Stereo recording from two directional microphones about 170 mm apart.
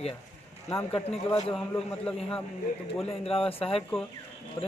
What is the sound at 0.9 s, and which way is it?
Speech, 35° left (ahead or behind).